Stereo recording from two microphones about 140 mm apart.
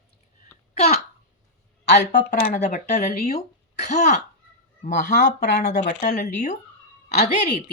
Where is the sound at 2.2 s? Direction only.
60° left (ahead or behind).